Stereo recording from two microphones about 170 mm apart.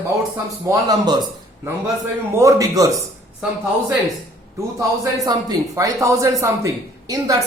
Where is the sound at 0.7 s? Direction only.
25° right (ahead or behind).